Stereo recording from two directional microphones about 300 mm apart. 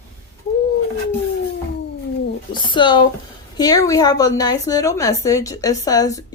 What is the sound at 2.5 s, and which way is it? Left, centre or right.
A woman's voice, centre.